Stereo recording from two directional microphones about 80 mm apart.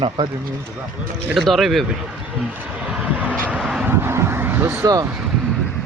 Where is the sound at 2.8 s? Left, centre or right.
Centre.